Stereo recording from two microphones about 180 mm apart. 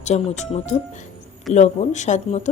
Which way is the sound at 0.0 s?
40° left (ahead or behind).